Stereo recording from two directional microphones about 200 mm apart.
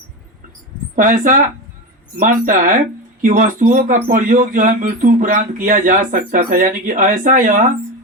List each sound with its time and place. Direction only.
0.9 s speech: 40° right (ahead or behind)